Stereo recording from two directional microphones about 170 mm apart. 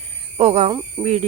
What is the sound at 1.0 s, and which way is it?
Speech, 25° right (ahead or behind).